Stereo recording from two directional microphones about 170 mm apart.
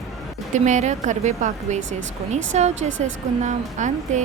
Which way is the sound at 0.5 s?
45° right (ahead or behind).